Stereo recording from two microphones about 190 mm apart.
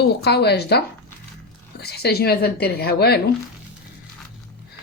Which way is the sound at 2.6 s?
55° left (ahead or behind).